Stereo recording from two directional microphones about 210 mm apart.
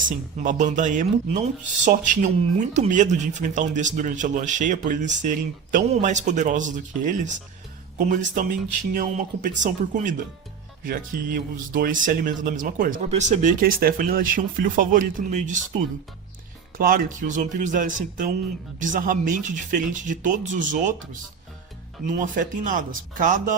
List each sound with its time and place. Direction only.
0.0 s speech: 35° right (ahead or behind)
16.7 s speech: 40° right (ahead or behind)
22.2 s speech: 40° right (ahead or behind)